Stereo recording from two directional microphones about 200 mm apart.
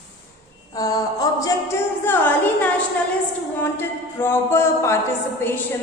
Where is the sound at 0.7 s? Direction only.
20° left (ahead or behind).